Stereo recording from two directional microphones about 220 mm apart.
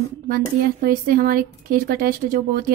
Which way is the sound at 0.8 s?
40° right (ahead or behind).